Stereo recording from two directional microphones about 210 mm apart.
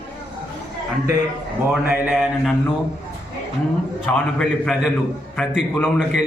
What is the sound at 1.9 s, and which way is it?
Speech, 5° right (ahead or behind).